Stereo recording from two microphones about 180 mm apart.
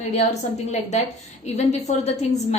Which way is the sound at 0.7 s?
40° left (ahead or behind).